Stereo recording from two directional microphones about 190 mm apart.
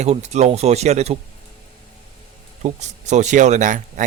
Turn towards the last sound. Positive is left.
turn(degrees=-40)  # may be behind; listen again after turning